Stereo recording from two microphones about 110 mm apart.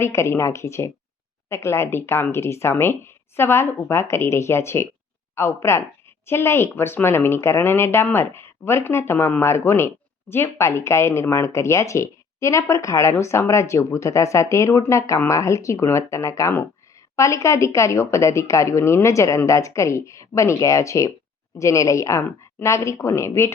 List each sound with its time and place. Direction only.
0.0 s a woman's voice: 25° left (ahead or behind)